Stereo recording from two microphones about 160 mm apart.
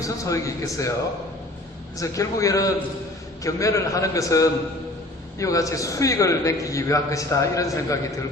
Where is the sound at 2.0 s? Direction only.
20° left (ahead or behind).